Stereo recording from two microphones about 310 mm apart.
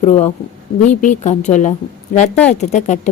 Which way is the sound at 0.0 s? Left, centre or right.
Left.